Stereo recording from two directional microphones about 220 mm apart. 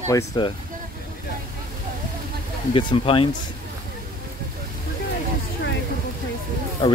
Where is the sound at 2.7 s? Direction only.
20° left (ahead or behind).